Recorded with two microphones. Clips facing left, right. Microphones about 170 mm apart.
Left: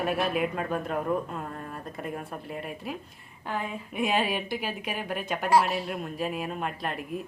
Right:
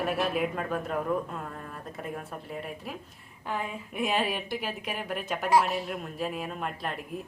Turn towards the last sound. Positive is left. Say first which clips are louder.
# left 2 dB
turn(degrees=0)  # may be behind; listen again after turning